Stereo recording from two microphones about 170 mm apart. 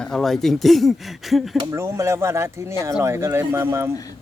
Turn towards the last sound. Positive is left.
turn(degrees=-15)  # may be behind; listen again after turning